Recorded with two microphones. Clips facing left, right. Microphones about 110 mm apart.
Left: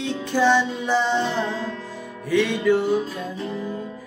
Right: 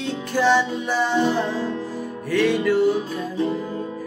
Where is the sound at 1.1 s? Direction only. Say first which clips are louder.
Right 3 dB; 10° right (ahead or behind).